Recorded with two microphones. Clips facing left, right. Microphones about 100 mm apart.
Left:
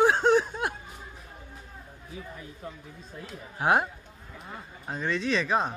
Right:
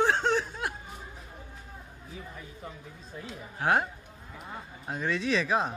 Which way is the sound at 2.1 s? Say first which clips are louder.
Left 2 dB; centre (ahead or behind).